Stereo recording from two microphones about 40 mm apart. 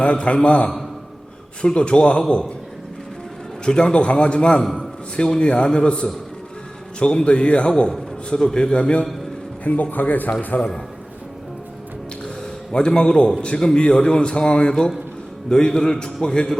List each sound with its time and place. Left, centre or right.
0.0 s a man's voice: left
3.7 s a man's voice: left
9.9 s speech: left
12.2 s a sound: left
13.6 s a man's voice: centre